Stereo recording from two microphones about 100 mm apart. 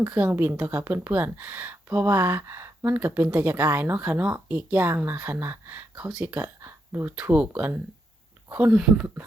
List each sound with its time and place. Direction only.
0.0 s a woman's voice: 15° right (ahead or behind)
6.2 s a sound: 15° right (ahead or behind)
7.2 s speech: 15° right (ahead or behind)